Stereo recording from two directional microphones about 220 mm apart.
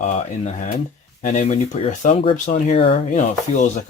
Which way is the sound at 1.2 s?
35° left (ahead or behind).